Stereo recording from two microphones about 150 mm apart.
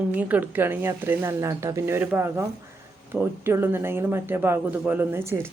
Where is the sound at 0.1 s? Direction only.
10° right (ahead or behind).